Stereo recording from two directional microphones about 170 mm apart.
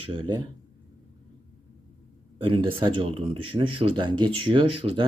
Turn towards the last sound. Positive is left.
turn(degrees=-30)  # may be behind; listen again after turning